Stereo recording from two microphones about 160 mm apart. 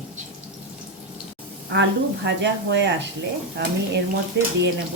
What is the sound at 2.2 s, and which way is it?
Speech, 90° right.